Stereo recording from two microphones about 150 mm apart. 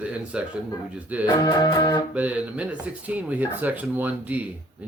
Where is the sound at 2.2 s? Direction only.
10° right (ahead or behind).